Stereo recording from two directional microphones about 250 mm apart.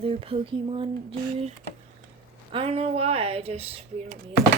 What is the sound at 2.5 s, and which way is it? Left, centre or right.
Speech, right.